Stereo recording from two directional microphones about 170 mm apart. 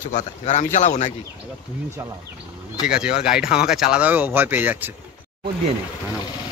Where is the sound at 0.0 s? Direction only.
45° left (ahead or behind).